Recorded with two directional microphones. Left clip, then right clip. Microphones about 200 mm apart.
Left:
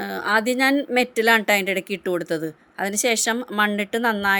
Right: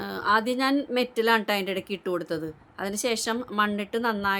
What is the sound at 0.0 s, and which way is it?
A woman's voice, 15° left (ahead or behind).